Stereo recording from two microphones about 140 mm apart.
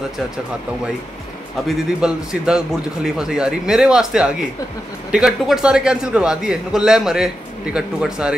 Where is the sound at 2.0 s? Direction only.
5° right (ahead or behind).